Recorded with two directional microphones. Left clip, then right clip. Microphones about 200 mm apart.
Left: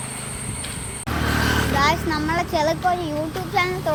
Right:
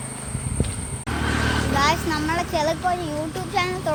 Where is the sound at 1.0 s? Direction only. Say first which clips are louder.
Left 2 dB; 55° left (ahead or behind).